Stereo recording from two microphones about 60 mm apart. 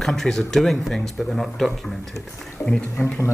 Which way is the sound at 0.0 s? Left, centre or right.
Centre.